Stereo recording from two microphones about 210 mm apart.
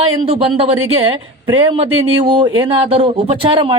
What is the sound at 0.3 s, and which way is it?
A woman's voice, 25° right (ahead or behind).